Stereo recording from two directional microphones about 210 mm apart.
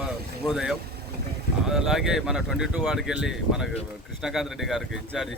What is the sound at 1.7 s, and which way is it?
Speech, centre (ahead or behind).